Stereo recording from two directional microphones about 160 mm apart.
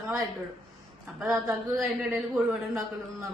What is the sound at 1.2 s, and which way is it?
Speech, 15° right (ahead or behind).